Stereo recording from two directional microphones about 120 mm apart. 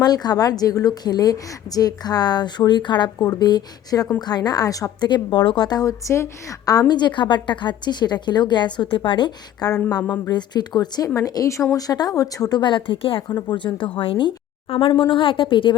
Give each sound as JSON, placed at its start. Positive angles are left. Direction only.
{"t": 0.0, "sound": "speech", "side_deg": 35}
{"t": 13.2, "sound": "speech", "side_deg": 35}